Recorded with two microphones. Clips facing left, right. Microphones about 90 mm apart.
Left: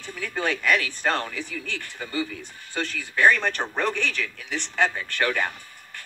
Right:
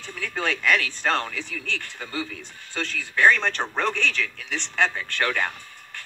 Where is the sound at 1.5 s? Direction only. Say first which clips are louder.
Right 1 dB; 65° right (ahead or behind).